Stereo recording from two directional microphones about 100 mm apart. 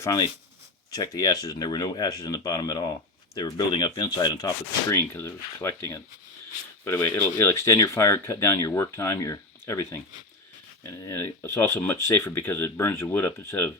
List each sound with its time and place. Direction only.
0.0 s speech: 40° left (ahead or behind)
4.9 s speech: 25° left (ahead or behind)
7.3 s speech: 25° left (ahead or behind)